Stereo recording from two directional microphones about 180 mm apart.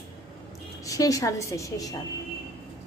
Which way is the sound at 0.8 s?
20° left (ahead or behind).